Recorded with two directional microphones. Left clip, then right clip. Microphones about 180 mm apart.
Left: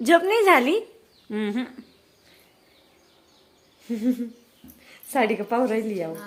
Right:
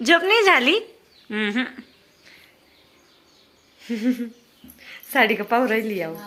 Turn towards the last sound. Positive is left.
turn(degrees=0)  # may be behind; listen again after turning